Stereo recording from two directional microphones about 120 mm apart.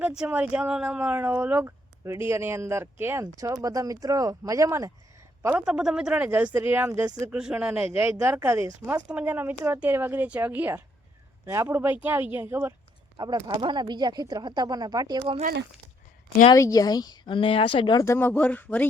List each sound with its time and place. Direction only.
0.2 s speech: 10° right (ahead or behind); by 4.9 s 25° right (ahead or behind)
5.5 s speech: 10° right (ahead or behind)
7.3 s speech: 10° right (ahead or behind)
8.4 s speech: 20° right (ahead or behind)
13.1 s speech: 35° right (ahead or behind)
15.2 s speech: 55° right (ahead or behind)
16.6 s speech: 30° left (ahead or behind)
18.0 s speech: 20° left (ahead or behind)